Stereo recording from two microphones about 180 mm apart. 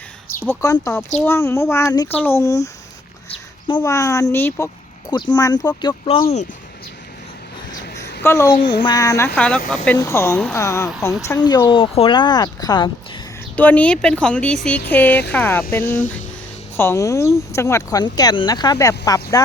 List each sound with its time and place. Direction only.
0.3 s speech: 15° left (ahead or behind)
3.8 s speech: 20° left (ahead or behind)
6.1 s speech: 35° left (ahead or behind)
7.9 s a sound: 70° left (ahead or behind)
8.2 s speech: 15° left (ahead or behind)
9.3 s speech: 5° left (ahead or behind)
9.8 s speech: 15° left (ahead or behind)
13.6 s speech: 10° left (ahead or behind)